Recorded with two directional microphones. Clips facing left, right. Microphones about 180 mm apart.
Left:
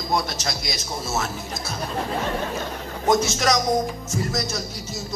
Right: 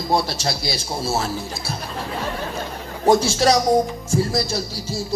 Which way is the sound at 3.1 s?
30° right (ahead or behind).